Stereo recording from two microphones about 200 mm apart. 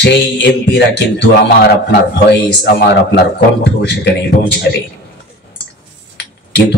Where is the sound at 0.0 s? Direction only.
55° left (ahead or behind).